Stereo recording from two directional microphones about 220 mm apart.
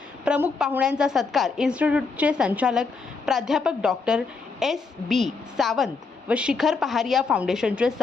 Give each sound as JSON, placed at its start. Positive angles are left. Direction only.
{"t": 0.3, "sound": "a woman's voice", "side_deg": -5}